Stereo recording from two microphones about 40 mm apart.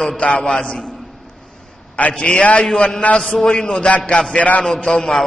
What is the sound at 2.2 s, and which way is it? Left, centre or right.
Speech, left.